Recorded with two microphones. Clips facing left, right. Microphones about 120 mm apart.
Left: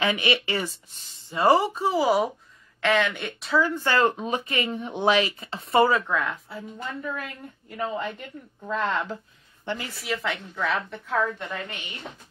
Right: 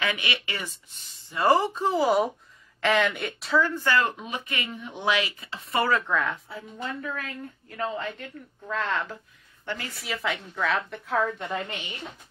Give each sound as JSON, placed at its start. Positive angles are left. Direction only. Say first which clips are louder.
{"t": 0.0, "sound": "a woman's voice", "louder": "left 5 dB", "side_deg": 25}
{"t": 3.7, "sound": "speech", "louder": "left 3 dB", "side_deg": 25}
{"t": 6.0, "sound": "a woman's voice", "louder": "even", "side_deg": 0}
{"t": 10.0, "sound": "a woman's voice", "louder": "left 1 dB", "side_deg": 0}